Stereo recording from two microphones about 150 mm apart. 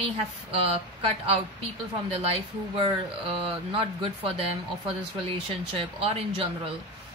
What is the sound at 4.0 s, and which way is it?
Speech, 40° right (ahead or behind).